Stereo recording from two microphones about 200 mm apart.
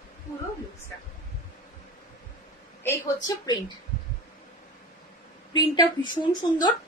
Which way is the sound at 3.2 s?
20° left (ahead or behind).